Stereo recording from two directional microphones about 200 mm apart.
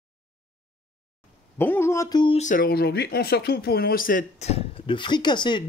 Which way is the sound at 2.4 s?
40° left (ahead or behind).